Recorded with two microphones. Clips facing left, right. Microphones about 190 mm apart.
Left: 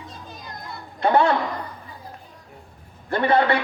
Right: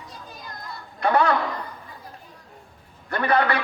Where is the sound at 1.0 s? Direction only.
25° left (ahead or behind).